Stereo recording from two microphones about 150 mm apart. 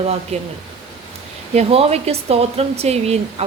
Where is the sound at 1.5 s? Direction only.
40° right (ahead or behind).